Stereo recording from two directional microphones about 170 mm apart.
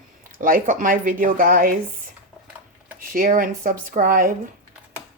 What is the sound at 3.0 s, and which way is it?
Speech, 55° right (ahead or behind).